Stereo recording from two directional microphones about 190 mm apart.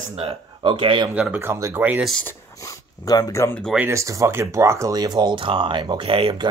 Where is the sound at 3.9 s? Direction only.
15° right (ahead or behind).